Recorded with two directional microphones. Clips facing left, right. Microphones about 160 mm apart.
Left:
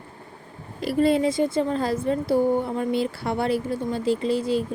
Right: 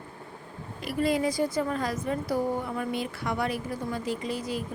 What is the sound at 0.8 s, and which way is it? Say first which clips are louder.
Speech: left 6 dB; 30° left (ahead or behind).